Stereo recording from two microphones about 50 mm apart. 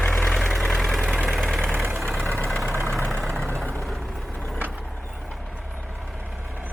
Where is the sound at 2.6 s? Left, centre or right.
Right.